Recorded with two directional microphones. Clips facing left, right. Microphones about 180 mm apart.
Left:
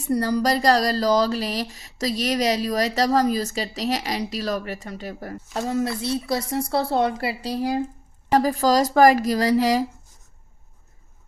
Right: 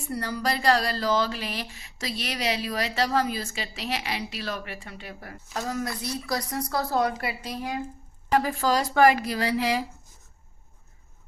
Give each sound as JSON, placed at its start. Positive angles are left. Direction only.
{"t": 0.0, "sound": "speech", "side_deg": 40}
{"t": 5.6, "sound": "a woman's voice", "side_deg": 25}